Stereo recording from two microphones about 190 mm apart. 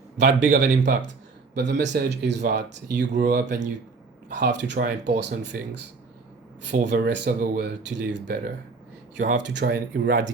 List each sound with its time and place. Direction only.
0.2 s speech: 65° right (ahead or behind)
3.4 s speech: 40° right (ahead or behind)
4.4 s speech: 65° right (ahead or behind)
6.8 s speech: 65° right (ahead or behind)
9.1 s speech: 40° right (ahead or behind)
9.4 s speech: 65° right (ahead or behind)